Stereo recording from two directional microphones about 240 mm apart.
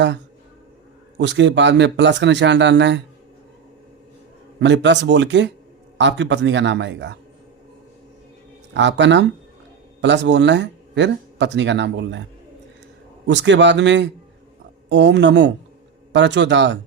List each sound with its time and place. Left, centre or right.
1.2 s speech: right
4.6 s speech: right
8.7 s speech: right
13.2 s speech: right